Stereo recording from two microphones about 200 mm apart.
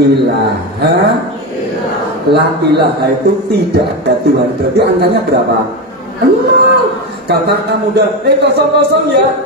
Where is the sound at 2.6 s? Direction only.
55° right (ahead or behind).